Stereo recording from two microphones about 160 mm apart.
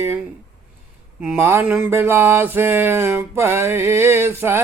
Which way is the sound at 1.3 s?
15° right (ahead or behind).